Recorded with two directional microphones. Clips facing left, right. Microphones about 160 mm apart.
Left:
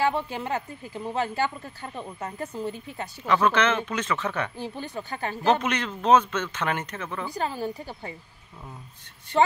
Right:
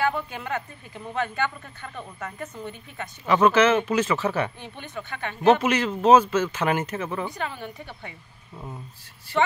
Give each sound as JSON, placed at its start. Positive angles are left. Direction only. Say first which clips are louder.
{"t": 0.0, "sound": "speech", "louder": "left 1 dB", "side_deg": 30}
{"t": 3.3, "sound": "speech", "louder": "right 4 dB", "side_deg": -10}
{"t": 4.6, "sound": "speech", "louder": "left 4 dB", "side_deg": 35}
{"t": 5.6, "sound": "speech", "louder": "right 5 dB", "side_deg": -5}
{"t": 7.3, "sound": "speech", "louder": "left 4 dB", "side_deg": 35}
{"t": 9.3, "sound": "speech", "louder": "left 2 dB", "side_deg": -5}